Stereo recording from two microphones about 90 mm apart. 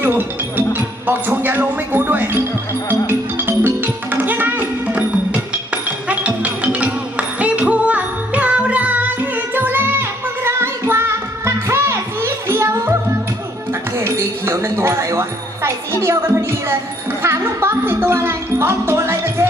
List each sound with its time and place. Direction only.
0.0 s music: 25° right (ahead or behind)
1.0 s speech: 20° right (ahead or behind)
3.1 s music: 25° right (ahead or behind)